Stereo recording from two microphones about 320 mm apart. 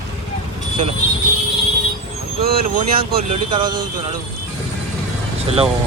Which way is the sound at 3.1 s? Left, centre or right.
Centre.